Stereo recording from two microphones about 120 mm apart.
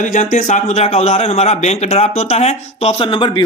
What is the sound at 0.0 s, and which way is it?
Speech, 90° left.